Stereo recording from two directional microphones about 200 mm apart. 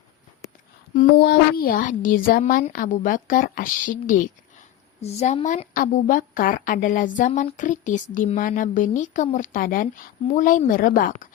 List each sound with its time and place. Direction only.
0.9 s a woman's voice: 55° left (ahead or behind)
4.9 s a woman's voice: 30° left (ahead or behind)